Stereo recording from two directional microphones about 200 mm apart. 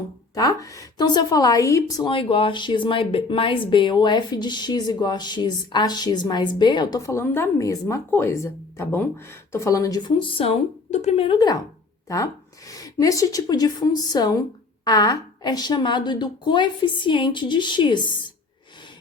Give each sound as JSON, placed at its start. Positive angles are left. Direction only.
{"t": 0.3, "sound": "a woman's voice", "side_deg": 15}